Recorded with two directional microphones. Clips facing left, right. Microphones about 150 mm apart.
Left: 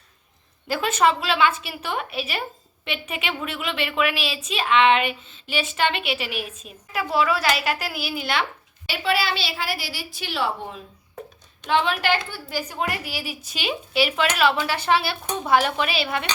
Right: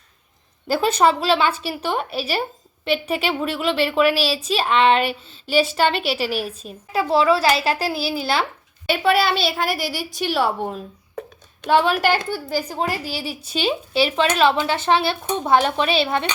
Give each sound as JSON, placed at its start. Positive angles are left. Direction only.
{"t": 0.7, "sound": "a woman's voice", "side_deg": -35}
{"t": 8.9, "sound": "a woman's voice", "side_deg": -50}